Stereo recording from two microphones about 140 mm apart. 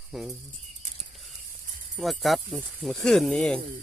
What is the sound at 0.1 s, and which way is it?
Speech, centre (ahead or behind).